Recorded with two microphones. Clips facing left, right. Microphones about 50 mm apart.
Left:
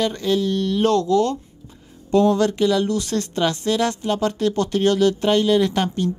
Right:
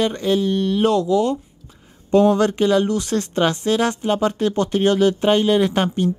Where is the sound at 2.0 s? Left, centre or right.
Right.